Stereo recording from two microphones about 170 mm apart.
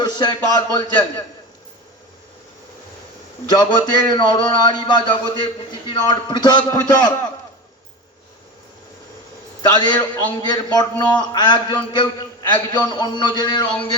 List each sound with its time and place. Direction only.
0.0 s speech: 25° left (ahead or behind)
3.5 s a man's voice: 25° left (ahead or behind)
9.6 s a man's voice: 25° left (ahead or behind)